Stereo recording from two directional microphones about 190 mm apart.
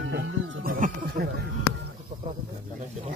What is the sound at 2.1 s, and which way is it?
Snake, 40° right (ahead or behind).